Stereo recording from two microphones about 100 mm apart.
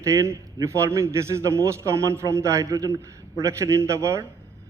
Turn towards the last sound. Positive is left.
turn(degrees=-30)  # may be behind; listen again after turning